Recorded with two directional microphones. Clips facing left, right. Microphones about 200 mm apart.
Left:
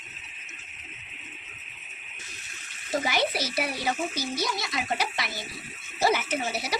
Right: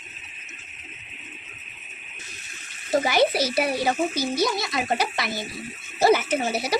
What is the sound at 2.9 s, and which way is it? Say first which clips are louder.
Speech: right 7 dB; 35° right (ahead or behind).